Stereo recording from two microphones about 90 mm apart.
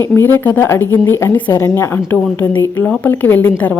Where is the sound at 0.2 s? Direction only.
25° left (ahead or behind).